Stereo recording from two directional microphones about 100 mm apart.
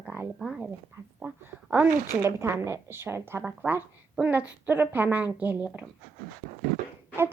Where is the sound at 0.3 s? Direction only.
Centre (ahead or behind).